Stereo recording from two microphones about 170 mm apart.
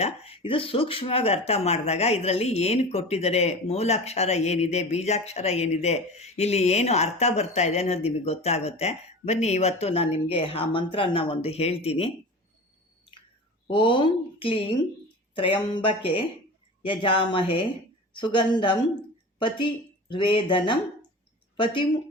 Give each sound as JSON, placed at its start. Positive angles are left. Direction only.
{"t": 0.0, "sound": "speech", "side_deg": 35}
{"t": 13.7, "sound": "speech", "side_deg": 30}
{"t": 20.1, "sound": "speech", "side_deg": 30}